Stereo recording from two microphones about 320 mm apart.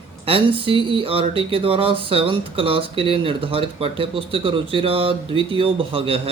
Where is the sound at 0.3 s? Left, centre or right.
Centre.